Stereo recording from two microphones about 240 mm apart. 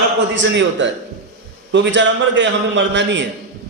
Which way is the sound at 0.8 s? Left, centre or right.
Right.